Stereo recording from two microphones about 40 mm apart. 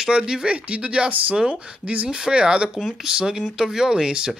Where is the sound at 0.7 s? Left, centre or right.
Right.